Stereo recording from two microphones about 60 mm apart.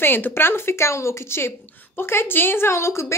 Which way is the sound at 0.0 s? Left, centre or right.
Left.